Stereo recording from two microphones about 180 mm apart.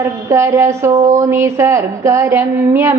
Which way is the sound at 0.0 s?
15° right (ahead or behind).